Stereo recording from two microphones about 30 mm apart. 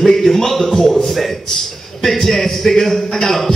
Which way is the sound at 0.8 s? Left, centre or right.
Centre.